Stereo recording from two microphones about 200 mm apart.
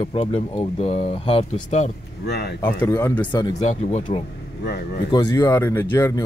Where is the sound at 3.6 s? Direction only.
35° left (ahead or behind).